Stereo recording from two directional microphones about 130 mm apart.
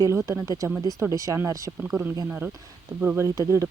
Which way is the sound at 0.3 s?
25° right (ahead or behind).